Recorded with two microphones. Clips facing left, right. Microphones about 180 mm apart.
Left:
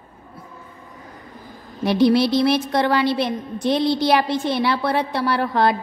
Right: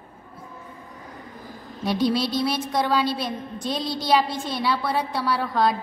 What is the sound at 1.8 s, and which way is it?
A woman's voice, 65° left (ahead or behind).